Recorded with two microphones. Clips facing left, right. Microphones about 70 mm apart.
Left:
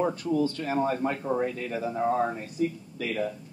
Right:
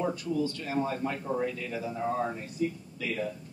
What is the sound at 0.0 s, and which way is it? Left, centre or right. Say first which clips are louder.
Speech: left 4 dB; left.